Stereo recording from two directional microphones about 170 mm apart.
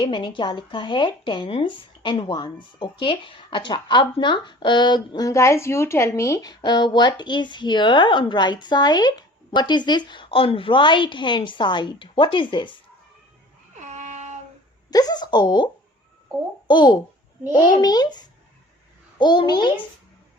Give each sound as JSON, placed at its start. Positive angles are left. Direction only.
{"t": 0.0, "sound": "speech", "side_deg": 25}
{"t": 13.7, "sound": "a sound", "side_deg": -45}
{"t": 14.8, "sound": "speech", "side_deg": 25}
{"t": 17.4, "sound": "a child's voice", "side_deg": -10}
{"t": 17.7, "sound": "speech", "side_deg": 25}